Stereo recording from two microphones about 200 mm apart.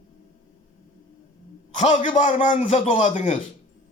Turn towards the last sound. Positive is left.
turn(degrees=35)  # may be behind; listen again after turning